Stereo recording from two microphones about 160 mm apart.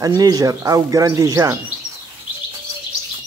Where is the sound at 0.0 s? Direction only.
20° right (ahead or behind).